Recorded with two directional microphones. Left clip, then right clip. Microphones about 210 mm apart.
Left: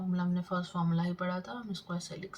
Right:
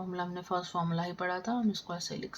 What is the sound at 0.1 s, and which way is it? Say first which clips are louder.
A woman's voice: right 2 dB; 50° right (ahead or behind).